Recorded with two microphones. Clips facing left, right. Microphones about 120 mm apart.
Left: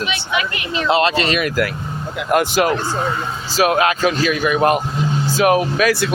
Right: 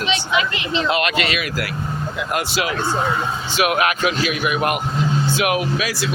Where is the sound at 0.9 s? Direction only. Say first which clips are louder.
Left 7 dB; 30° left (ahead or behind); by 2.7 s 50° left (ahead or behind).